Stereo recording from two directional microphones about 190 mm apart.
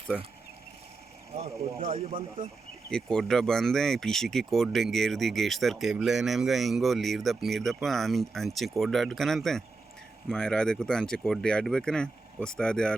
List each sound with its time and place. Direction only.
1.3 s speech: 35° right (ahead or behind)
2.9 s speech: 5° left (ahead or behind)